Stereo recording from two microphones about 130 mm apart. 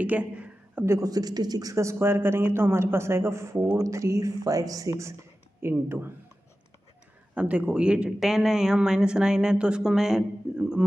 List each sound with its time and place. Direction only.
0.0 s a sound: 10° right (ahead or behind)
0.8 s a man's voice: 25° right (ahead or behind)
7.3 s speech: 10° right (ahead or behind)